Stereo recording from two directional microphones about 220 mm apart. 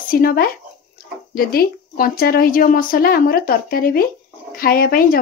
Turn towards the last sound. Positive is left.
turn(degrees=40)  # may be behind; listen again after turning